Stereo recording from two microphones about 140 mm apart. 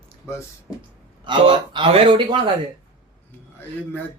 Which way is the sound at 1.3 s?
35° right (ahead or behind).